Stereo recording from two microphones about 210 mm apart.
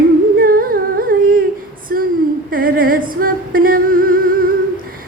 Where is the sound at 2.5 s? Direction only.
45° right (ahead or behind).